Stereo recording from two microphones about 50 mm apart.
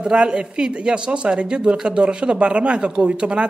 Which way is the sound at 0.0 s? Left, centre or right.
Centre.